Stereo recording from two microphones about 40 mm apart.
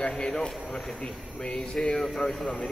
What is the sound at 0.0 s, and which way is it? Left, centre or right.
Speech, centre.